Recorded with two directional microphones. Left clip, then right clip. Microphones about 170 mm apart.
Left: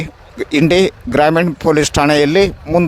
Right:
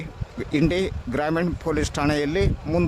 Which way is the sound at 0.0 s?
40° left (ahead or behind).